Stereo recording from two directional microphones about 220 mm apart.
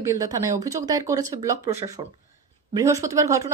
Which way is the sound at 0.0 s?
15° right (ahead or behind).